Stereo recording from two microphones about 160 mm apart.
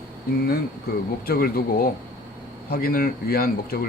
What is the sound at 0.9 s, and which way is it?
Speech, 75° left (ahead or behind).